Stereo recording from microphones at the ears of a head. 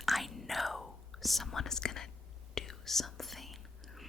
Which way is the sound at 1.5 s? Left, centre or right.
Left.